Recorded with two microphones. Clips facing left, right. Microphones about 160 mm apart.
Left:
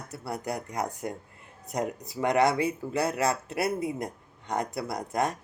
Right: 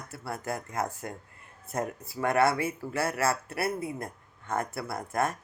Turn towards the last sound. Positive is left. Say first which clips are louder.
# left 1 dB
turn(degrees=20)  # may be behind; listen again after turning